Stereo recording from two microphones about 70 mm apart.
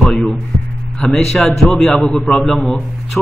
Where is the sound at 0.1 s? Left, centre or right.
Centre.